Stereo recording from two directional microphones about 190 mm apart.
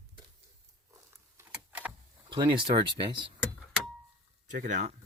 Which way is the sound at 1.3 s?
10° right (ahead or behind).